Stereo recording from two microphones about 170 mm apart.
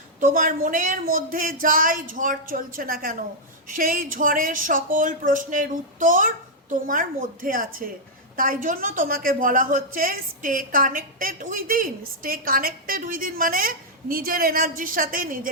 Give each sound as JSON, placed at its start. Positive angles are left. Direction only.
{"t": 0.2, "sound": "a woman's voice", "side_deg": -55}